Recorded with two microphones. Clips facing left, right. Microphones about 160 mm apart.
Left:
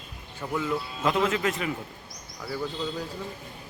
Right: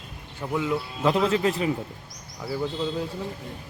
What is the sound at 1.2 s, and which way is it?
Speech, 35° right (ahead or behind).